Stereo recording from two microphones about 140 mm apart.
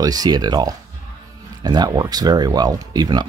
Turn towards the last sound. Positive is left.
turn(degrees=-30)  # may be behind; listen again after turning